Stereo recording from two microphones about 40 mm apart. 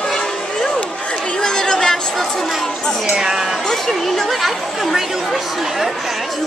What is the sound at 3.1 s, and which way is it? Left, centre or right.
Speech, centre.